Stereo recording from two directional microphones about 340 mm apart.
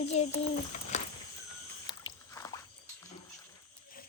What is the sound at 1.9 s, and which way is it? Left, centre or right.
Biting, centre.